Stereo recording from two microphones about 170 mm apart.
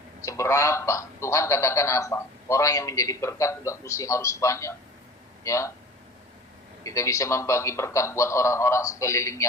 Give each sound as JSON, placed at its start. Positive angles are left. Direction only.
{"t": 0.2, "sound": "a man's voice", "side_deg": 15}
{"t": 6.8, "sound": "a man's voice", "side_deg": 20}